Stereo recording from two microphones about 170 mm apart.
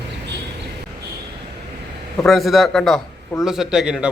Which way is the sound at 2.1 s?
Centre (ahead or behind).